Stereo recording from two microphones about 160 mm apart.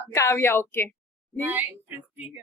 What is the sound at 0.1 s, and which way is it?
Speech, 15° left (ahead or behind).